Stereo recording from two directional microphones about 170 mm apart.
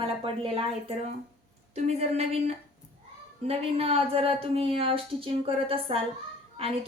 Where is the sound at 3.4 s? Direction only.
35° right (ahead or behind).